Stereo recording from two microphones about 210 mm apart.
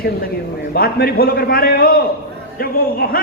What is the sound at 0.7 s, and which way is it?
A man's voice, 45° left (ahead or behind).